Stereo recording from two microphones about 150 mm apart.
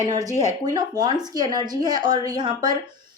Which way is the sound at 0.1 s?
25° right (ahead or behind).